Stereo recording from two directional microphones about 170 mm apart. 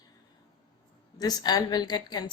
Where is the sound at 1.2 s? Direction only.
20° left (ahead or behind).